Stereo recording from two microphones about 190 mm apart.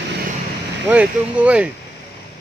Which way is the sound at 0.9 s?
5° right (ahead or behind).